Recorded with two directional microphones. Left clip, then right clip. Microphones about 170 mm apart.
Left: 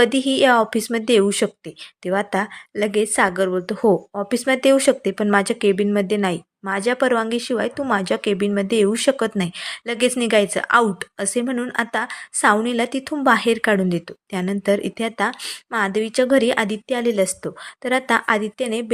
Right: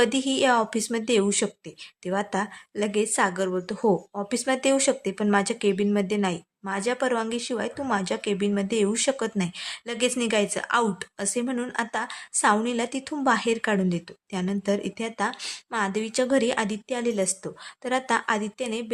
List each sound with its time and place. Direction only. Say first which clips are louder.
0.0 s a woman's voice: left 6 dB; 15° left (ahead or behind)